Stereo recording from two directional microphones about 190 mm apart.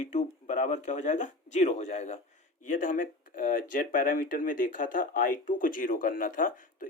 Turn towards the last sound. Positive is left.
turn(degrees=45)  # may be behind; listen again after turning